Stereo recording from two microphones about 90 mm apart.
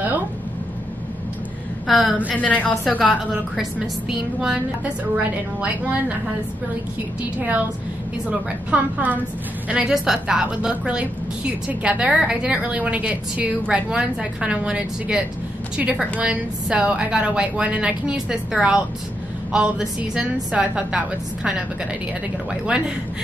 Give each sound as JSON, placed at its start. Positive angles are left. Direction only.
{"t": 1.9, "sound": "a woman's voice", "side_deg": 0}
{"t": 2.3, "sound": "a woman's voice", "side_deg": 15}
{"t": 3.3, "sound": "a woman's voice", "side_deg": -5}
{"t": 7.3, "sound": "a woman's voice", "side_deg": -15}
{"t": 22.5, "sound": "a woman's voice", "side_deg": -10}